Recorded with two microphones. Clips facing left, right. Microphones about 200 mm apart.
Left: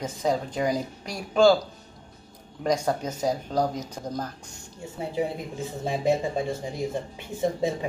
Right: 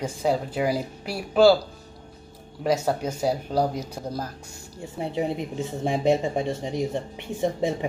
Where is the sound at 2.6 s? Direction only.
5° right (ahead or behind).